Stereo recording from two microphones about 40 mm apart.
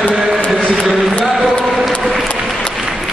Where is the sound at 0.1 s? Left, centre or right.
Centre.